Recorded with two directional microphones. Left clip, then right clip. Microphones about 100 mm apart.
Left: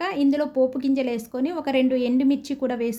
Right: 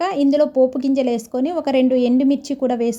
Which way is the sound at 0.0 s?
30° right (ahead or behind).